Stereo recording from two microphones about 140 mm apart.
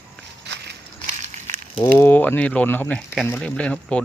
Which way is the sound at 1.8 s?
15° left (ahead or behind).